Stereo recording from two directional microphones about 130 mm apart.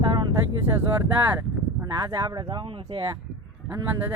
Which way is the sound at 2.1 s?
35° right (ahead or behind).